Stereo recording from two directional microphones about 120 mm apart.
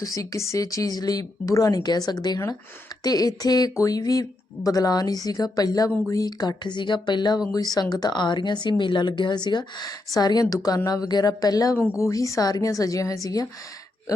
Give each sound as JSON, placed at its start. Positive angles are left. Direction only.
{"t": 0.0, "sound": "speech", "side_deg": 30}